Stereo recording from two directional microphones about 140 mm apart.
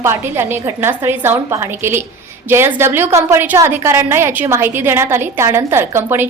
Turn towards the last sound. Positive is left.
turn(degrees=-15)  # may be behind; listen again after turning